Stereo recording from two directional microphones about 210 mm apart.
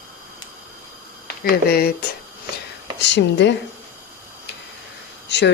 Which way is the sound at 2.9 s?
55° left (ahead or behind).